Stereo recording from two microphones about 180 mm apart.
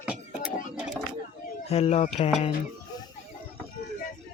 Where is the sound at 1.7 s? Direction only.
35° left (ahead or behind).